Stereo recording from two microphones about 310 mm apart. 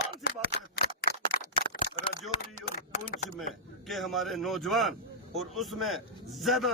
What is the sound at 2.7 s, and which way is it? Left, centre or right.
Speech, left.